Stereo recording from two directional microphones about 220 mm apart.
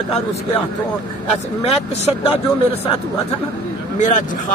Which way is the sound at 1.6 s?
30° left (ahead or behind).